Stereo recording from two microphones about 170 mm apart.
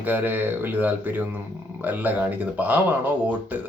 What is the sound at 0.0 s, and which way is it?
Speech, 10° right (ahead or behind).